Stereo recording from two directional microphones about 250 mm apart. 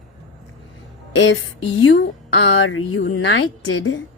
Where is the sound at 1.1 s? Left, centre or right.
Left.